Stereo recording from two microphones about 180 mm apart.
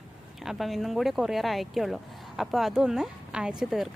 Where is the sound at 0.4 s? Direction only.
Centre (ahead or behind).